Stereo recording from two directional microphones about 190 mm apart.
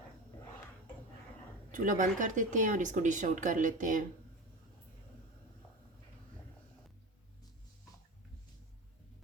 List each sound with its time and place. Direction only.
1.7 s speech: 45° right (ahead or behind)